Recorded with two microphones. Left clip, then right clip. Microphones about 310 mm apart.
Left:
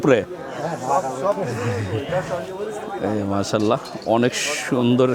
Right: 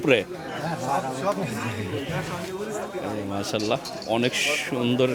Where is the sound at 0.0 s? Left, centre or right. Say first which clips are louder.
Left 4 dB; left.